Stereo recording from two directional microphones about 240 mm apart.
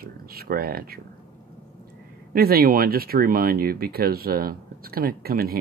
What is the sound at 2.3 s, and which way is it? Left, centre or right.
Speech, right.